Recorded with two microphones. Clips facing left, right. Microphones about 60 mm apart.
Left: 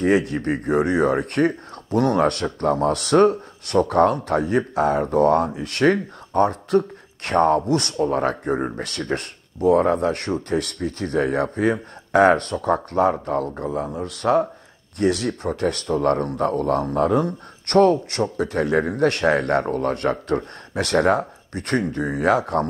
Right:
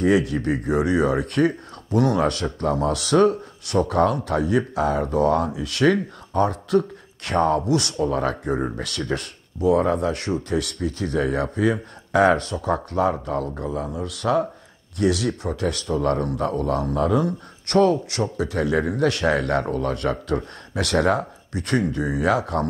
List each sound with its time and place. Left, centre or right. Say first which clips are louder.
0.0 s speech: even; left